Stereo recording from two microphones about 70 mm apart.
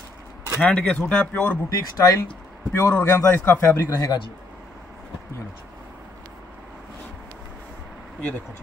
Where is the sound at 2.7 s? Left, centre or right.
Left.